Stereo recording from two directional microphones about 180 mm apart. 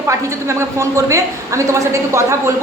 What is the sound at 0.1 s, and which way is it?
A woman's voice, 15° right (ahead or behind).